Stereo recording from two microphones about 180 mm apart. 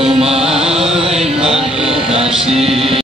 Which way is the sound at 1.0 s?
35° right (ahead or behind).